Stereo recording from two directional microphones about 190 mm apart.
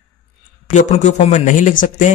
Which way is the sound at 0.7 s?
40° left (ahead or behind).